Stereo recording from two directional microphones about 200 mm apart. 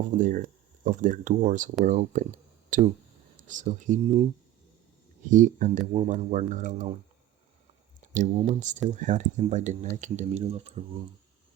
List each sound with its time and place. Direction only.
0.2 s speech: 40° right (ahead or behind)
5.3 s speech: 40° right (ahead or behind)
8.1 s speech: 40° right (ahead or behind)